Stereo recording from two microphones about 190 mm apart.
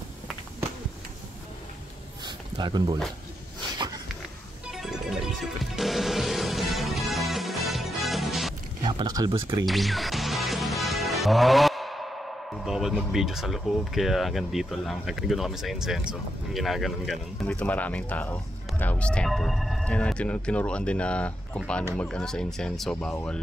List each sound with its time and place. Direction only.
2.2 s a sound: 25° right (ahead or behind)
4.6 s music: centre (ahead or behind)
8.8 s speech: 20° right (ahead or behind)
9.7 s music: centre (ahead or behind)
21.9 s speech: 5° left (ahead or behind)